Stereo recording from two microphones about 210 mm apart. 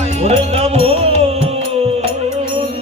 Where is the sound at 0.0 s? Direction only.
30° right (ahead or behind).